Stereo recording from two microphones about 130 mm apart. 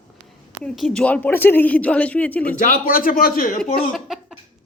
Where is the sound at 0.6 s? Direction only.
5° left (ahead or behind).